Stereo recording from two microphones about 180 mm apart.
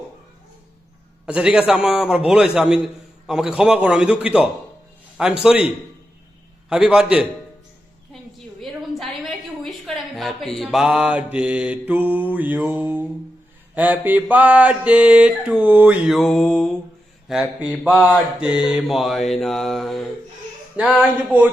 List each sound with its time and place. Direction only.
1.3 s a man's voice: 5° right (ahead or behind)
8.1 s a sound: centre (ahead or behind)
13.7 s mantra: 10° right (ahead or behind)
15.6 s a man's voice: 10° right (ahead or behind)
21.0 s mantra: 10° right (ahead or behind)